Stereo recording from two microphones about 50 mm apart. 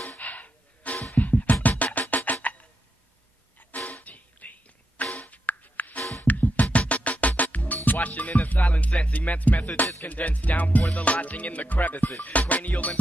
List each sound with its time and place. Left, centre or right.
0.2 s music: left
3.9 s music: left